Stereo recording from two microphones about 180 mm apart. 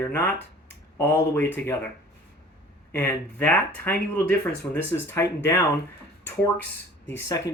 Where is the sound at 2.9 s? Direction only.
10° left (ahead or behind).